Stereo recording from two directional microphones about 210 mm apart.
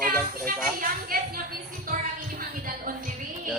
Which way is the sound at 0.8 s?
45° right (ahead or behind).